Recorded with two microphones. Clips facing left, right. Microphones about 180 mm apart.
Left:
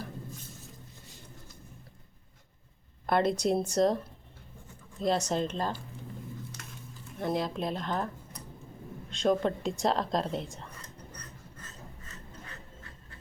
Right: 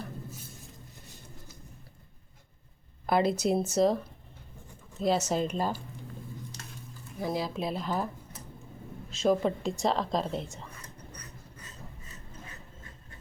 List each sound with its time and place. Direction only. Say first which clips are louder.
3.1 s a woman's voice: right 1 dB; 5° right (ahead or behind)
7.2 s a woman's voice: left 1 dB; 5° right (ahead or behind)
11.1 s a sound: even; 10° right (ahead or behind)